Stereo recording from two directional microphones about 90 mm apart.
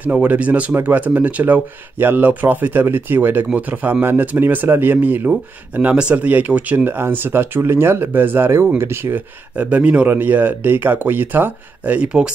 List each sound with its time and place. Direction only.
0.0 s speech: 20° right (ahead or behind)